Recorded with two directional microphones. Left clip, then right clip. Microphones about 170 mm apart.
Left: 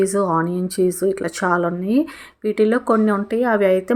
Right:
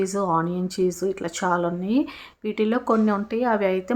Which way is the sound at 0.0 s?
20° left (ahead or behind).